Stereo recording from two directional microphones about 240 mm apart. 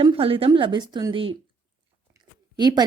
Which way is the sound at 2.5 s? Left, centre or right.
Centre.